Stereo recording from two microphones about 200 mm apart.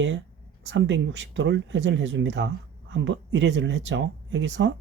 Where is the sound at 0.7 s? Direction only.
65° right (ahead or behind).